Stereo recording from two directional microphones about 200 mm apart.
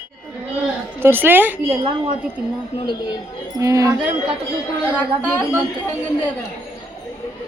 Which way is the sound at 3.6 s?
15° right (ahead or behind).